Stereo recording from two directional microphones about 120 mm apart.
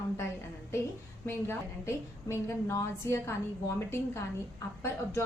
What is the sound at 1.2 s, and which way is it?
A woman's voice, 20° left (ahead or behind).